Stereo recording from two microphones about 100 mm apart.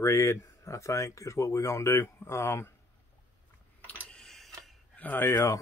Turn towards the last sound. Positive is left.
turn(degrees=30)  # may be behind; listen again after turning